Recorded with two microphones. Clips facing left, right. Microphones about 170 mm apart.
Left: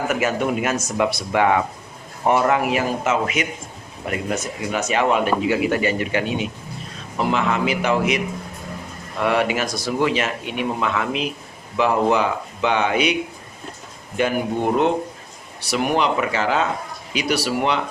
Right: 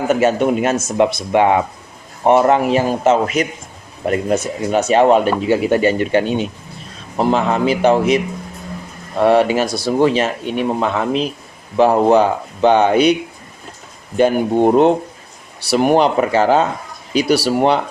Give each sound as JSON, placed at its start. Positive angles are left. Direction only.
{"t": 0.1, "sound": "speech", "side_deg": -30}
{"t": 14.2, "sound": "speech", "side_deg": -35}